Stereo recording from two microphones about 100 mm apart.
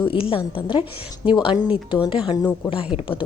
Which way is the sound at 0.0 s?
60° left (ahead or behind).